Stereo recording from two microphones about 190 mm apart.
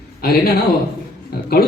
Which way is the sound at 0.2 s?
55° left (ahead or behind).